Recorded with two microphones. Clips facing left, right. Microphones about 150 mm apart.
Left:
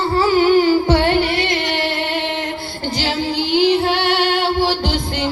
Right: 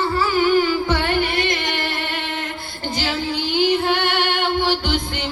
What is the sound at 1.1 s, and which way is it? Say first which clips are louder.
Music: left 3 dB; 50° right (ahead or behind).